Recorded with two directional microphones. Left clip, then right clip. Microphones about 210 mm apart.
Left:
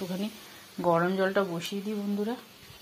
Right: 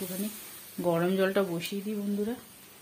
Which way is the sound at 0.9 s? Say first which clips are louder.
Right 1 dB; 25° right (ahead or behind).